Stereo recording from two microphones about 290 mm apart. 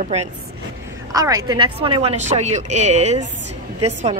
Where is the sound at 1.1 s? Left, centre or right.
Centre.